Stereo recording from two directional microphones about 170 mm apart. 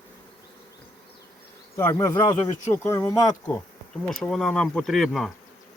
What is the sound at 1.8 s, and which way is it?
Speech, 15° left (ahead or behind).